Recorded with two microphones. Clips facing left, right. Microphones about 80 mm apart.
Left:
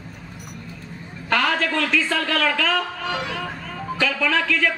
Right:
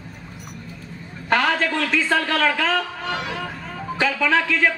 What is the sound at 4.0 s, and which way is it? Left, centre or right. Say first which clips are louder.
Speech: right 2 dB; right.